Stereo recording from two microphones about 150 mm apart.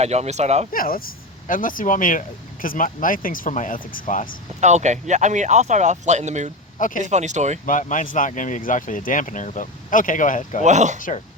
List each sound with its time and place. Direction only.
0.0 s speech: 45° right (ahead or behind)
0.7 s speech: 70° left (ahead or behind)
4.6 s speech: 50° right (ahead or behind)
6.7 s speech: 60° left (ahead or behind)
7.0 s speech: 50° right (ahead or behind)
7.7 s speech: 60° left (ahead or behind)
10.6 s speech: 50° right (ahead or behind)